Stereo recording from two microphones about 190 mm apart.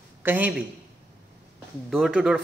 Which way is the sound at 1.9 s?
5° right (ahead or behind).